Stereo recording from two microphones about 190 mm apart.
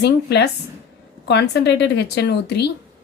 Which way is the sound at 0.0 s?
60° left (ahead or behind).